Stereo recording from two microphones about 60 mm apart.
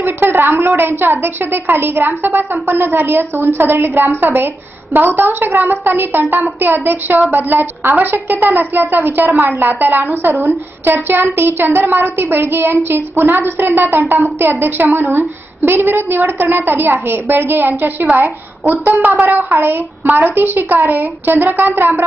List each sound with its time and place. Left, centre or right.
0.0 s a woman's voice: right
18.9 s speech: right
19.2 s a woman's voice: right